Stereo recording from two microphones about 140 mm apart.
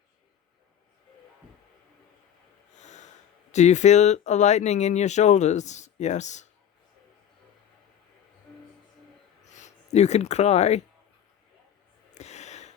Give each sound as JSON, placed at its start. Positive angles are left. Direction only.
{"t": 2.7, "sound": "snort", "side_deg": 55}
{"t": 3.5, "sound": "speech", "side_deg": 55}
{"t": 9.4, "sound": "speech", "side_deg": 55}
{"t": 12.1, "sound": "gasp", "side_deg": 55}